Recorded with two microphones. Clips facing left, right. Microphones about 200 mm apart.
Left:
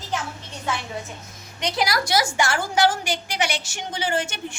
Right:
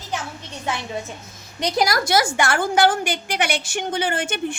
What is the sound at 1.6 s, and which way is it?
A woman's voice, 40° right (ahead or behind).